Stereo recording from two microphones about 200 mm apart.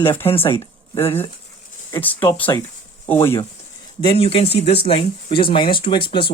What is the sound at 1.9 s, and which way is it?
Speech, 15° left (ahead or behind).